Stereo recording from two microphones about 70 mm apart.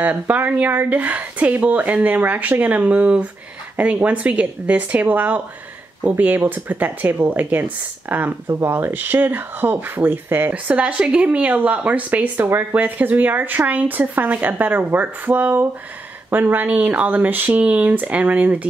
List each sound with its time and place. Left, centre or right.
0.0 s speech: right
8.5 s speech: right; by 18.7 s centre